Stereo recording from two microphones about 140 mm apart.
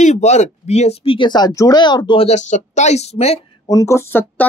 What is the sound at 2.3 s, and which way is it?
A woman's voice, 55° left (ahead or behind).